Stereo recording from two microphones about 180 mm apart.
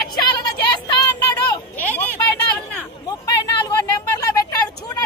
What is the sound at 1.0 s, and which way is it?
Child singing, 20° left (ahead or behind).